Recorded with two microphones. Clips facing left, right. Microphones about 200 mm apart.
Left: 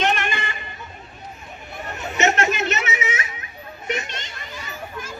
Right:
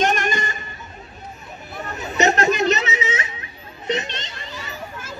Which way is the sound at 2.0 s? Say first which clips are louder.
Right 2 dB; 35° right (ahead or behind).